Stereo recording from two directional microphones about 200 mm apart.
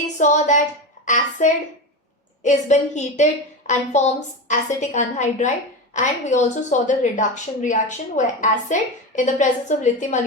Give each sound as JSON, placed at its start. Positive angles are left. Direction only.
{"t": 0.2, "sound": "a woman's voice", "side_deg": 35}